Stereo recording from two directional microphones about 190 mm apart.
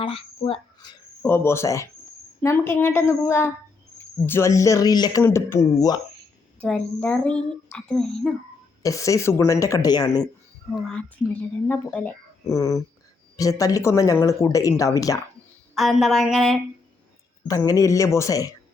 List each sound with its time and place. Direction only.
0.0 s speech: 30° left (ahead or behind)
1.2 s speech: 10° left (ahead or behind)
6.6 s a woman's voice: 5° left (ahead or behind)
8.8 s speech: 15° left (ahead or behind)
10.7 s speech: 5° left (ahead or behind)
15.7 s a woman's voice: centre (ahead or behind)
17.5 s speech: 15° left (ahead or behind)